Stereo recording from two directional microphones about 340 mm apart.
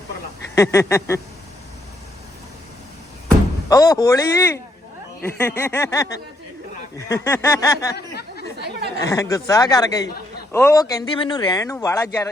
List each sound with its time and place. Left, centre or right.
0.5 s speech: centre
3.2 s speech: centre
7.9 s a sound: left
9.0 s speech: centre